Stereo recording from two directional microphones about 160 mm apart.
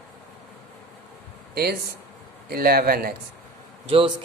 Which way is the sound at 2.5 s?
70° right (ahead or behind).